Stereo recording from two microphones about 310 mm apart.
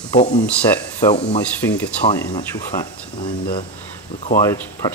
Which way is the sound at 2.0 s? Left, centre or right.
Centre.